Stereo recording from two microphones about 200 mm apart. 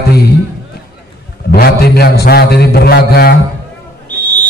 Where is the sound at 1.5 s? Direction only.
50° left (ahead or behind).